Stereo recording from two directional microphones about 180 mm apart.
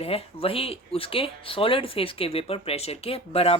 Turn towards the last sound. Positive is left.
turn(degrees=35)  # may be behind; listen again after turning